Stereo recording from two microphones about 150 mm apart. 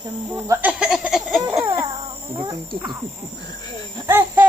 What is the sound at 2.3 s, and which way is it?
Speech, 35° right (ahead or behind).